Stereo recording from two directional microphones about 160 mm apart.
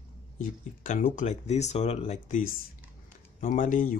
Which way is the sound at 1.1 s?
45° left (ahead or behind).